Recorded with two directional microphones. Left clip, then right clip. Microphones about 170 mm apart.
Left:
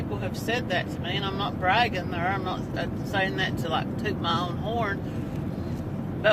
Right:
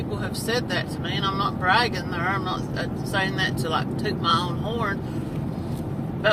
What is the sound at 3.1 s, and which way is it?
Speech, 20° right (ahead or behind).